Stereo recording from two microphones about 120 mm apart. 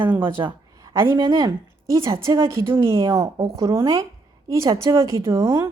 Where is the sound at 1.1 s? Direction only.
35° right (ahead or behind).